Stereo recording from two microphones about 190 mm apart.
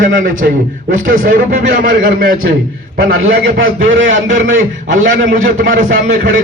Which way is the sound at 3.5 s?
90° right.